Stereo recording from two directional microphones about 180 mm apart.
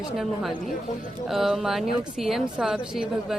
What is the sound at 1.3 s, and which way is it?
A woman's voice, centre (ahead or behind).